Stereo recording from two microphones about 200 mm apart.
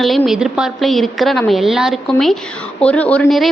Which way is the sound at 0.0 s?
Centre (ahead or behind).